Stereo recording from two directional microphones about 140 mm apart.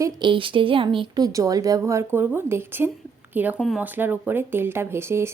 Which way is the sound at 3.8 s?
15° right (ahead or behind).